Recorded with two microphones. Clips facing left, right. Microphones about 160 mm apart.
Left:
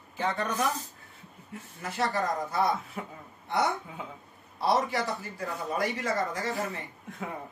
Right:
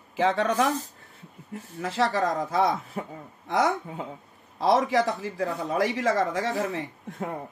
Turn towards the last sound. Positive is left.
turn(degrees=-40)  # may be behind; listen again after turning